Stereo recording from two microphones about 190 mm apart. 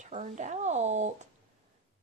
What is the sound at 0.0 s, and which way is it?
A woman's voice, 40° right (ahead or behind).